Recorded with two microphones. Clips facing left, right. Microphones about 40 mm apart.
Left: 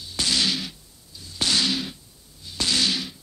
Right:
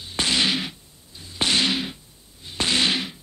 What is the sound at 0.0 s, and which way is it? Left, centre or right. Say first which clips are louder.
Whip: right 2 dB; right.